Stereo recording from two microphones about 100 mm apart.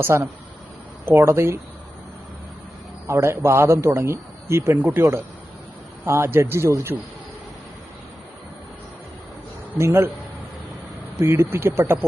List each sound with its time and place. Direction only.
0.0 s speech: 25° right (ahead or behind)
3.1 s speech: 25° right (ahead or behind)
6.1 s speech: 25° right (ahead or behind)
9.7 s speech: 25° right (ahead or behind)
11.3 s speech: 20° right (ahead or behind)